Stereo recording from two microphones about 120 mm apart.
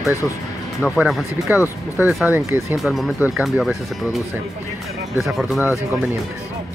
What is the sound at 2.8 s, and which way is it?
Speech, centre (ahead or behind).